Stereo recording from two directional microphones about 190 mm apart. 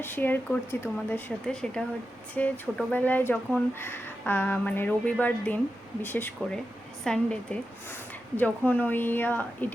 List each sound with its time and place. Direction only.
0.0 s a woman's voice: 10° left (ahead or behind)